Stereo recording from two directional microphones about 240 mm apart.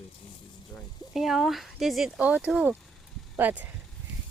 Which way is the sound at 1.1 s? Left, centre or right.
Centre.